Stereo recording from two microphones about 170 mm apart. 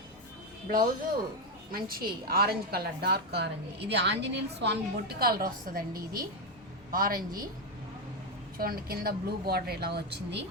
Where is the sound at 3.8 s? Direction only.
90° right; by 7.4 s 55° right (ahead or behind).